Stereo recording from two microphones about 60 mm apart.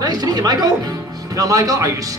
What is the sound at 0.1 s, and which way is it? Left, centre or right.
Speech, right.